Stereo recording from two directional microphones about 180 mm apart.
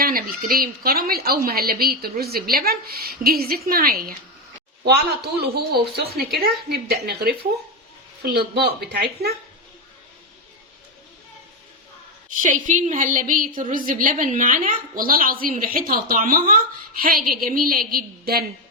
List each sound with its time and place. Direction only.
0.0 s a woman's voice: 55° right (ahead or behind)
12.3 s a woman's voice: 45° right (ahead or behind)